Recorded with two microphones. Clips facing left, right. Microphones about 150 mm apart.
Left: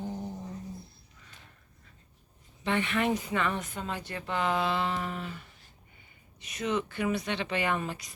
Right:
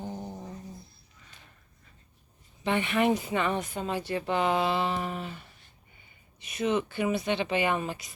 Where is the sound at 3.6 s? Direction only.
25° right (ahead or behind).